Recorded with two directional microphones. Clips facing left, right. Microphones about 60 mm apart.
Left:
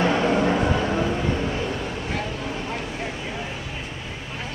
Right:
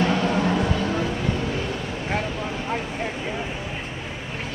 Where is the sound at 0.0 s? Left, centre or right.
Left.